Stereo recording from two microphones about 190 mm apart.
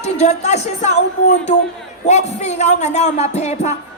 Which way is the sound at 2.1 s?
35° left (ahead or behind).